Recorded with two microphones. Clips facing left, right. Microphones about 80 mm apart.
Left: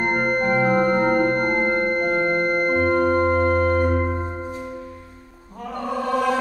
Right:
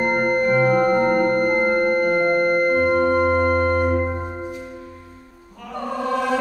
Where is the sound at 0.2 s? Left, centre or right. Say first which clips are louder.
Right 3 dB; left.